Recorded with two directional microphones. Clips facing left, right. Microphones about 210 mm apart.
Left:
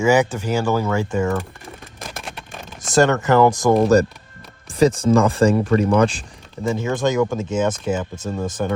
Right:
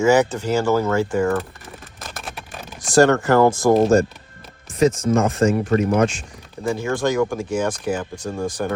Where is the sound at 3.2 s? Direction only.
20° left (ahead or behind).